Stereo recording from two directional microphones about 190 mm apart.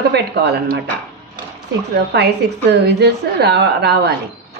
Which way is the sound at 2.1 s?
60° right (ahead or behind).